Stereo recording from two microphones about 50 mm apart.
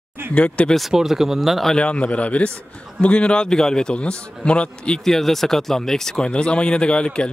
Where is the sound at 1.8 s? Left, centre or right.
Left.